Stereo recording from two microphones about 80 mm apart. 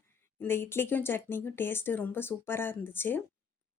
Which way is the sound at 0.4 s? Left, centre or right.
Left.